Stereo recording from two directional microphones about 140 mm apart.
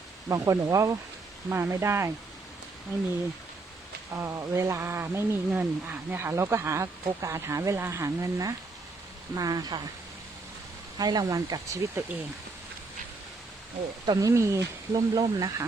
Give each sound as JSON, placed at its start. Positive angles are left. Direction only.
{"t": 0.3, "sound": "speech", "side_deg": -20}
{"t": 4.1, "sound": "speech", "side_deg": -20}
{"t": 10.9, "sound": "speech", "side_deg": -30}
{"t": 14.1, "sound": "speech", "side_deg": -25}